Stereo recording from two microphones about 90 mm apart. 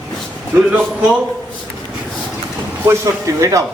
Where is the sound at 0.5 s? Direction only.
15° right (ahead or behind).